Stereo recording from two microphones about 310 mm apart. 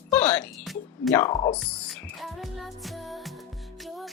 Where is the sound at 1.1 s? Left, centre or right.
Centre.